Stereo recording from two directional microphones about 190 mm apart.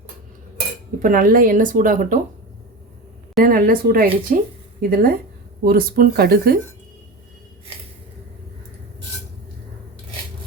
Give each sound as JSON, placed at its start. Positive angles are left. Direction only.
{"t": 1.0, "sound": "speech", "side_deg": -50}
{"t": 3.4, "sound": "speech", "side_deg": -50}